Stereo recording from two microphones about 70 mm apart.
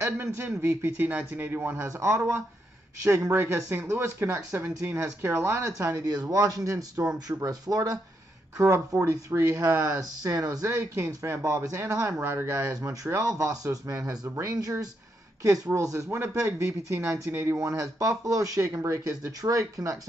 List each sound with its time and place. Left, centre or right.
0.0 s speech: right
1.9 s speech: right
8.5 s speech: right